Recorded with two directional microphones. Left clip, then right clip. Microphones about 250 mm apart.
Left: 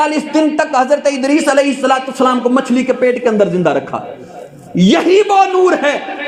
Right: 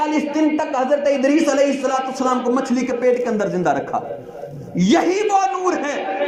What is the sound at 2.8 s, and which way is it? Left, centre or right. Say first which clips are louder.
A man's voice: left 3 dB; left.